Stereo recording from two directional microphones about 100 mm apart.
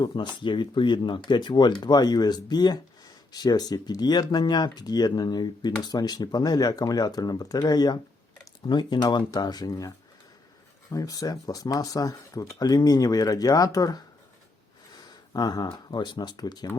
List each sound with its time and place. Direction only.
0.0 s speech: 50° left (ahead or behind)
15.3 s speech: 40° left (ahead or behind)